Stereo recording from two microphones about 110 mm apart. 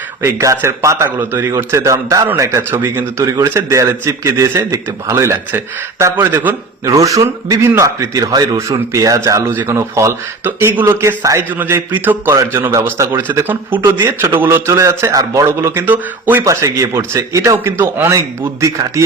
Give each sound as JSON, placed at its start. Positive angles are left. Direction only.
{"t": 0.2, "sound": "a man's voice", "side_deg": -25}
{"t": 6.8, "sound": "a man's voice", "side_deg": -30}
{"t": 16.4, "sound": "a man's voice", "side_deg": -30}